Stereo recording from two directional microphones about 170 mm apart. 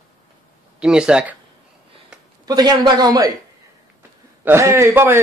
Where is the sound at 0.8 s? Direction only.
5° right (ahead or behind).